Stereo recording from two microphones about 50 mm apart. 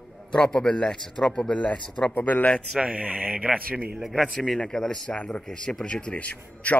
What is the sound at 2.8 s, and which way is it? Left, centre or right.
Speech, right.